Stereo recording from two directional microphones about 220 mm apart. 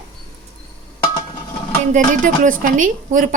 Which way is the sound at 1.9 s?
35° right (ahead or behind).